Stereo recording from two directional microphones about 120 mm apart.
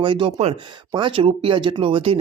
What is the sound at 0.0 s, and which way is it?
Speech, 45° right (ahead or behind).